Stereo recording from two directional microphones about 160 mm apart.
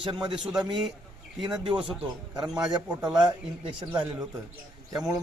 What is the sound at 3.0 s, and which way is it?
Speech, 25° right (ahead or behind).